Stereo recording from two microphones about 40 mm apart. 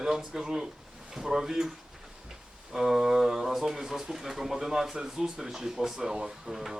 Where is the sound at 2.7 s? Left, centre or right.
Centre.